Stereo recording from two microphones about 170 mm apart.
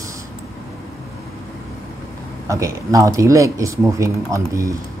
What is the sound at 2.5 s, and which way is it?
Speech, 20° right (ahead or behind).